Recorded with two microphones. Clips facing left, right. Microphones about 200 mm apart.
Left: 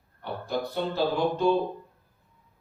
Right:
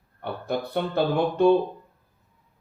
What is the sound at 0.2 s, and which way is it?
Speech, 55° right (ahead or behind).